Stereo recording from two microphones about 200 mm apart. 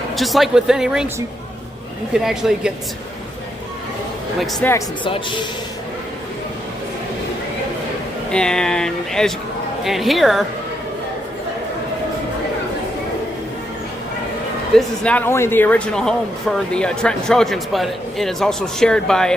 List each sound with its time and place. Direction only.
0.2 s speech: centre (ahead or behind)
2.1 s speech: 5° right (ahead or behind)
4.4 s speech: 10° left (ahead or behind)
5.0 s a man's voice: 25° left (ahead or behind)
8.3 s speech: 5° left (ahead or behind)
14.7 s speech: 5° left (ahead or behind)